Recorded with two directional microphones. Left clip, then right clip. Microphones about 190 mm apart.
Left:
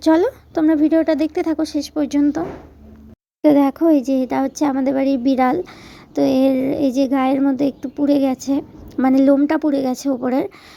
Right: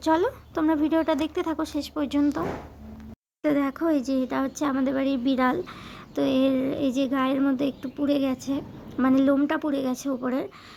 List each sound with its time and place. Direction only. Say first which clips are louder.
0.0 s a woman's voice: left 8 dB; 25° left (ahead or behind)
3.4 s a child's voice: left 10 dB; 25° left (ahead or behind)